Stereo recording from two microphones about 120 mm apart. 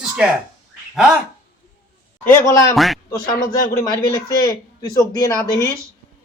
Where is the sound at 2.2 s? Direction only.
20° left (ahead or behind).